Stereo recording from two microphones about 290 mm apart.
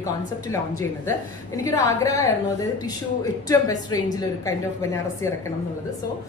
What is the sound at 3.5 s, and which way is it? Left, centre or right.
A woman's voice, centre.